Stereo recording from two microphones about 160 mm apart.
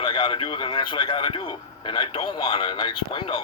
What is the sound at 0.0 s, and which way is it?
A man's voice, 30° left (ahead or behind).